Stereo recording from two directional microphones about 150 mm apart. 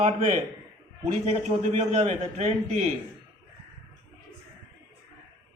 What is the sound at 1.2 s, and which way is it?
A man's voice, 50° right (ahead or behind).